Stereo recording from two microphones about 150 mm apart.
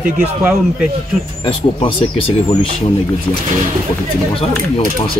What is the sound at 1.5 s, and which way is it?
Speech, 35° left (ahead or behind).